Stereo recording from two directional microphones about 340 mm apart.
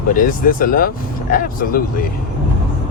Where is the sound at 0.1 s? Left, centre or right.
Left.